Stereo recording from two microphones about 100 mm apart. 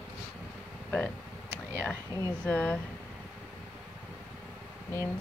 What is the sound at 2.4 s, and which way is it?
Speech, 15° left (ahead or behind).